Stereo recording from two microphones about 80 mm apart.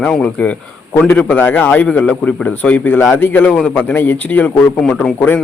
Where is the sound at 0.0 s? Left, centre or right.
Centre.